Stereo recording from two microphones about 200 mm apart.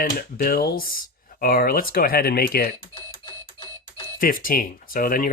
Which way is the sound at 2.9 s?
25° left (ahead or behind).